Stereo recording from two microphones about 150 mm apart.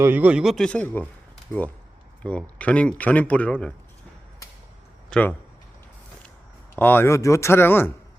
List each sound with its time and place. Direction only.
0.0 s speech: 10° right (ahead or behind); by 1.0 s 10° left (ahead or behind)
2.2 s speech: 10° left (ahead or behind)
5.0 s speech: 10° left (ahead or behind)
6.7 s speech: 15° left (ahead or behind)